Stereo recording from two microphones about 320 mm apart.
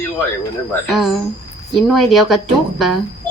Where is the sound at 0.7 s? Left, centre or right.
Centre.